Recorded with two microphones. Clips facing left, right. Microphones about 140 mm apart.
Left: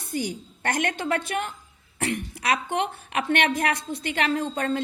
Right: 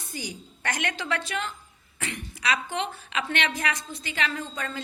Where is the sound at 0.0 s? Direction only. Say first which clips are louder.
Left 8 dB; 55° left (ahead or behind).